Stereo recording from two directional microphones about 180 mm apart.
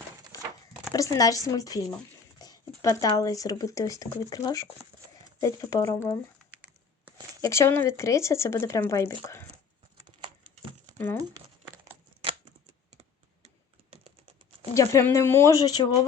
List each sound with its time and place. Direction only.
0.9 s speech: 20° left (ahead or behind)
2.4 s a sound: 20° left (ahead or behind)
3.1 s speech: 20° left (ahead or behind)
7.4 s speech: 15° left (ahead or behind)
9.2 s a sound: 15° left (ahead or behind)
10.9 s speech: 10° left (ahead or behind)
11.2 s crumpling: 20° right (ahead or behind)
14.7 s speech: 15° left (ahead or behind)